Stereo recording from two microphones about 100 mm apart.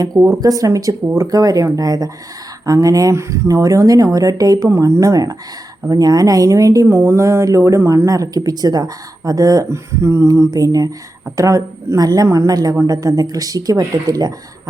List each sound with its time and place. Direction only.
0.3 s speech: 35° right (ahead or behind)